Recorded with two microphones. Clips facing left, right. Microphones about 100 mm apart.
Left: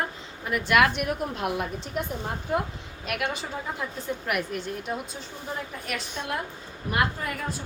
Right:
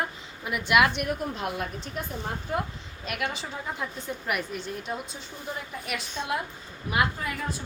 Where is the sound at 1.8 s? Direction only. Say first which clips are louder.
Left 4 dB; 20° left (ahead or behind).